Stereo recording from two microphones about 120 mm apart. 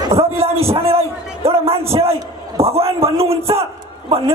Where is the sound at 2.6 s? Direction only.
55° right (ahead or behind).